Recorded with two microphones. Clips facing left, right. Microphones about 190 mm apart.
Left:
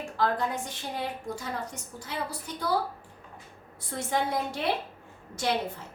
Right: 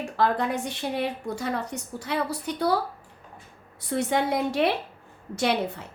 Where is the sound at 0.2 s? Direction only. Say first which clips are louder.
Right 4 dB; 70° right (ahead or behind).